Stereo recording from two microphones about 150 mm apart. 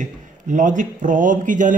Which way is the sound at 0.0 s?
55° right (ahead or behind).